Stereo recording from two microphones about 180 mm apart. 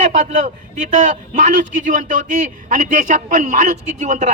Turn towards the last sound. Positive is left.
turn(degrees=-40)  # may be behind; listen again after turning